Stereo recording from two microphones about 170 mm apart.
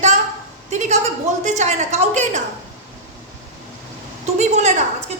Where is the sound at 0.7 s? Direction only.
45° right (ahead or behind).